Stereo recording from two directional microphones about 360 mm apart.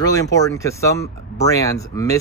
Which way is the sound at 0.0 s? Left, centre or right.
Centre.